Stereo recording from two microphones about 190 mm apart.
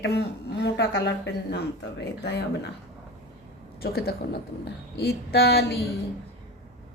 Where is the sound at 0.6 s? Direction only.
60° left (ahead or behind).